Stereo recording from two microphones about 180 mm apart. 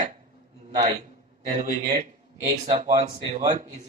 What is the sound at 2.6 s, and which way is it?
Speech, 40° right (ahead or behind).